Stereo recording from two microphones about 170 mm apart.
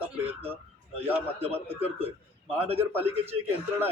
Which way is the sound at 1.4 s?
35° right (ahead or behind).